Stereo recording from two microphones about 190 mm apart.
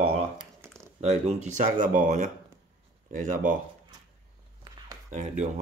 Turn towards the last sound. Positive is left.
turn(degrees=-40)  # may be behind; listen again after turning